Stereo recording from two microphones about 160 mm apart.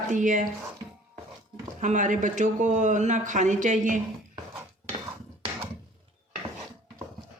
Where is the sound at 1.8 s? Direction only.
50° right (ahead or behind).